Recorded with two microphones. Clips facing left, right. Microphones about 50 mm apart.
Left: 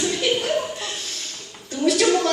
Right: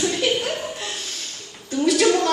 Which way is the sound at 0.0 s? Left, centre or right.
Centre.